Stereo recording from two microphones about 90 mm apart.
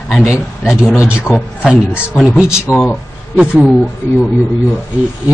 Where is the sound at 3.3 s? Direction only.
10° right (ahead or behind).